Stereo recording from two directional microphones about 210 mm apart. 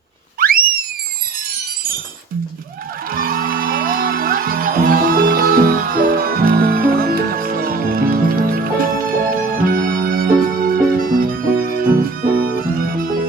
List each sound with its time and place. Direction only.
0.3 s whistle: 45° right (ahead or behind)
3.1 s music: 45° right (ahead or behind)